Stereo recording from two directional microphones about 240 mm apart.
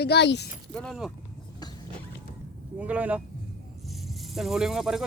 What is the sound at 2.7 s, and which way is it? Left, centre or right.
Speech, centre.